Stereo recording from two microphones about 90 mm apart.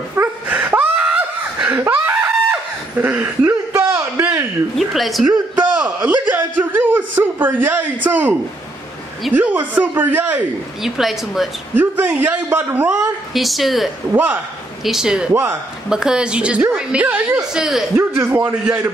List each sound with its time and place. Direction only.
0.1 s snicker: 20° right (ahead or behind)
2.5 s a sound: 20° right (ahead or behind)
4.7 s a woman's voice: centre (ahead or behind)
5.8 s a man's voice: 15° right (ahead or behind)
10.8 s a woman's voice: centre (ahead or behind)
11.7 s a man's voice: 20° right (ahead or behind)
13.3 s a woman's voice: centre (ahead or behind)
14.1 s a man's voice: 20° right (ahead or behind)
14.9 s a woman's voice: 5° right (ahead or behind)
17.4 s a woman's voice: 5° right (ahead or behind)
17.9 s a man's voice: 30° right (ahead or behind)